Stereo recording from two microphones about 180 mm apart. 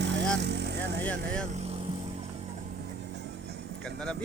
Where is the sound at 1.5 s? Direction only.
35° right (ahead or behind).